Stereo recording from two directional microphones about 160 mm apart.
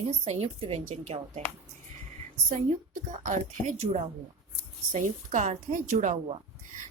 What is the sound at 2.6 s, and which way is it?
A woman's voice, 50° right (ahead or behind).